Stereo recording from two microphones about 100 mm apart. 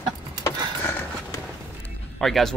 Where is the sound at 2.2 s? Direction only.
5° left (ahead or behind).